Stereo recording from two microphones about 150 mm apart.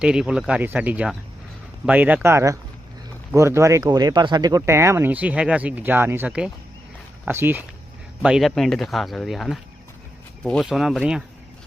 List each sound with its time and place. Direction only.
0.0 s speech: 5° right (ahead or behind)
8.2 s speech: 5° right (ahead or behind)